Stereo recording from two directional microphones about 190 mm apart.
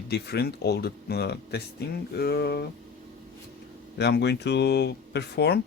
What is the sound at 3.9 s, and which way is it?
Speech, 60° left (ahead or behind).